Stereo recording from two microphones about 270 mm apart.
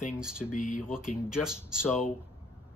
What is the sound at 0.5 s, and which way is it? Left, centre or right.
Speech, left.